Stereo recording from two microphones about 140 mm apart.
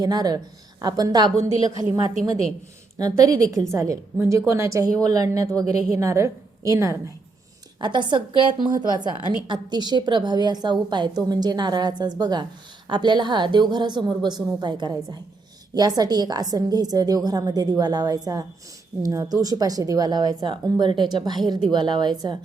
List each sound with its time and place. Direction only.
0.0 s speech: 30° right (ahead or behind)
3.0 s speech: 25° right (ahead or behind)
7.8 s a woman's voice: 35° right (ahead or behind)